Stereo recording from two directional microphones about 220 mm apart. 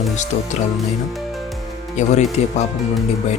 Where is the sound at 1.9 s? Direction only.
30° left (ahead or behind).